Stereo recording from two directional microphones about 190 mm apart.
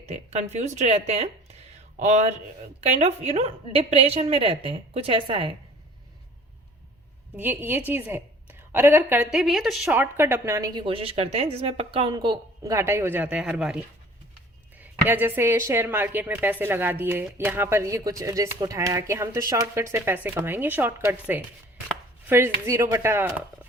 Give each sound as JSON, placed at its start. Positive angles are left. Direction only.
{"t": 0.0, "sound": "a woman's voice", "side_deg": -35}
{"t": 7.3, "sound": "a woman's voice", "side_deg": -10}